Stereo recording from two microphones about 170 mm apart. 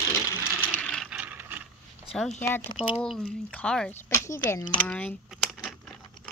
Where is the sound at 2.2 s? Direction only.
5° left (ahead or behind).